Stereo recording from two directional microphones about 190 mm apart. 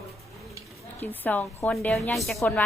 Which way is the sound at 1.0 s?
10° left (ahead or behind).